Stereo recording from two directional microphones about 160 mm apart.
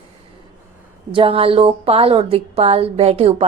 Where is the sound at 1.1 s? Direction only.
35° right (ahead or behind).